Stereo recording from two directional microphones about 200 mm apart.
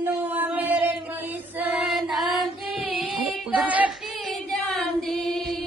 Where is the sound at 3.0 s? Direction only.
Centre (ahead or behind).